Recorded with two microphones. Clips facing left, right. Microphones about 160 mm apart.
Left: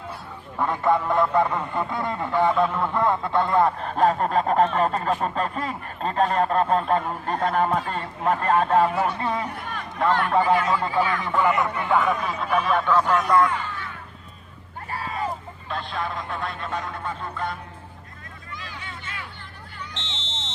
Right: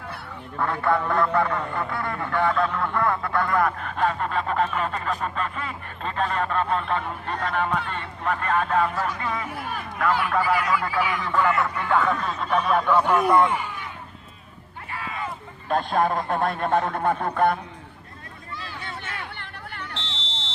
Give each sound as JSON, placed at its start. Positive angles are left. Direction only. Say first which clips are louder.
{"t": 0.6, "sound": "speech", "louder": "left 2 dB", "side_deg": 20}
{"t": 9.5, "sound": "speech", "louder": "right 1 dB", "side_deg": -5}
{"t": 10.2, "sound": "speech", "louder": "left 3 dB", "side_deg": 25}
{"t": 13.5, "sound": "a sound", "louder": "right 1 dB", "side_deg": -15}
{"t": 14.8, "sound": "a sound", "louder": "left 3 dB", "side_deg": 40}
{"t": 15.7, "sound": "a man's voice", "louder": "right 8 dB", "side_deg": -50}
{"t": 19.9, "sound": "buzzer", "louder": "right 1 dB", "side_deg": -35}